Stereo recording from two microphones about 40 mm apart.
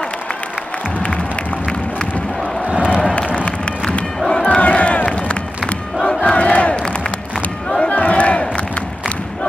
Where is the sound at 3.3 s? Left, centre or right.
Left.